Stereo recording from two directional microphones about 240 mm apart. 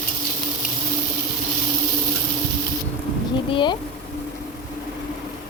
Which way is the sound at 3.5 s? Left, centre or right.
Centre.